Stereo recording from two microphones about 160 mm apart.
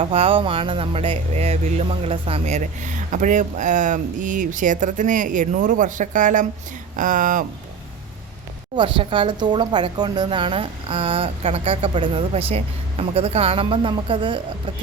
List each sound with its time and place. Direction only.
0.0 s speech: 35° right (ahead or behind); by 7.4 s 55° right (ahead or behind)
8.7 s speech: 30° right (ahead or behind)